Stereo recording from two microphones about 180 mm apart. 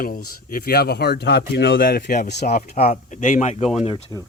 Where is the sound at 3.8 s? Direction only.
25° left (ahead or behind).